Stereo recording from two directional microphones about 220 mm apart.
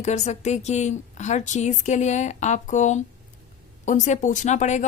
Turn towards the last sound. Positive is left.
turn(degrees=35)  # may be behind; listen again after turning